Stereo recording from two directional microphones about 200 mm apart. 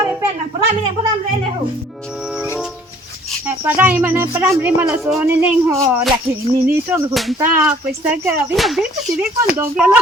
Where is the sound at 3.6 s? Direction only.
10° right (ahead or behind).